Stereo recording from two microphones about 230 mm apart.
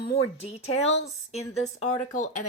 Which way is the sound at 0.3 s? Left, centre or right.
Left.